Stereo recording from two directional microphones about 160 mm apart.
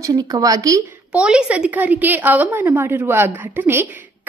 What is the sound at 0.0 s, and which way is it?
Speech, 20° right (ahead or behind).